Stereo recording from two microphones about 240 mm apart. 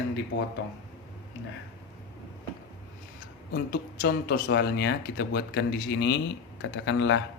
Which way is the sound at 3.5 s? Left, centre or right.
Left.